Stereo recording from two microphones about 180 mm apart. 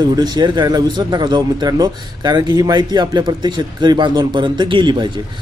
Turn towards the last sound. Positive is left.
turn(degrees=-25)  # may be behind; listen again after turning